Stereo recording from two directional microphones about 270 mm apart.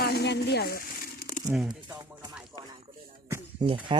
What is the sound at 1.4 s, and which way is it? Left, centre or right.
Speech, centre.